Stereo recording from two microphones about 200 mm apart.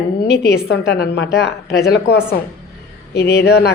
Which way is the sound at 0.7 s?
55° left (ahead or behind).